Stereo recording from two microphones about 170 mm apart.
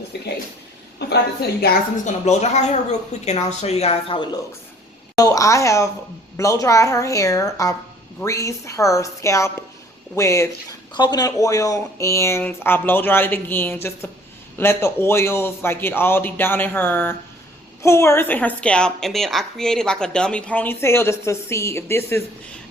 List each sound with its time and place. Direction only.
0.1 s a woman's voice: 75° left (ahead or behind)
2.0 s a woman's voice: 40° left (ahead or behind); by 22.2 s 15° left (ahead or behind)